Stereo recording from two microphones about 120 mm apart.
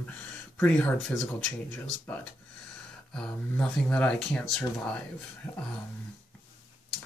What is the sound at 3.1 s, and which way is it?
Speech, 5° left (ahead or behind).